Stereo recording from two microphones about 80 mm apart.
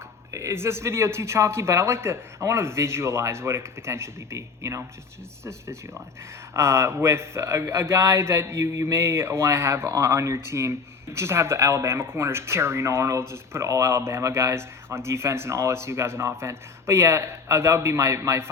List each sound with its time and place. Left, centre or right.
0.3 s speech: right
6.5 s speech: right